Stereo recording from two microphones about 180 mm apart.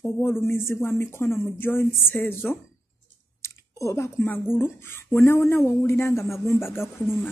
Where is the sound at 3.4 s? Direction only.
15° left (ahead or behind).